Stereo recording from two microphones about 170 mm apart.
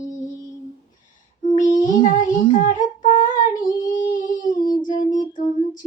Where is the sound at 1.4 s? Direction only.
50° left (ahead or behind).